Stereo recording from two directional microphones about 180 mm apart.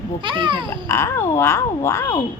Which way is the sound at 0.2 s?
25° right (ahead or behind).